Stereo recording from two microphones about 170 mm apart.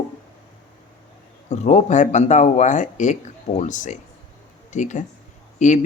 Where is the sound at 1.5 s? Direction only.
40° left (ahead or behind).